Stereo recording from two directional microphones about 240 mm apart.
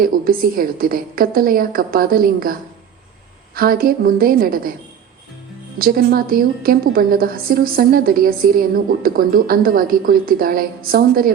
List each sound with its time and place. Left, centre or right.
0.0 s a woman's voice: right
5.8 s a woman's voice: right